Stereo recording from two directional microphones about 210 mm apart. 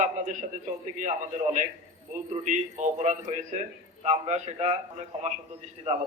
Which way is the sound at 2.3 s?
35° right (ahead or behind).